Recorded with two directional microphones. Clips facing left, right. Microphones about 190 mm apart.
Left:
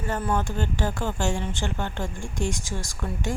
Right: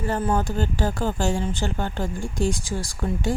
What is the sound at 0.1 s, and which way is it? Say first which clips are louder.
Speech: right 2 dB; 30° right (ahead or behind).